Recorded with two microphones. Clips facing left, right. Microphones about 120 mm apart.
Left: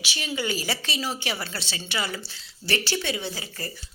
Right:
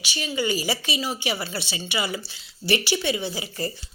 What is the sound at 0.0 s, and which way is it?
A woman's voice, centre (ahead or behind).